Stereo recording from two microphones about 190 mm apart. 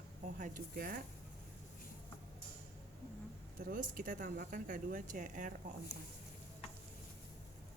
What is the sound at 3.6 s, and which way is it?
Speech, 45° right (ahead or behind).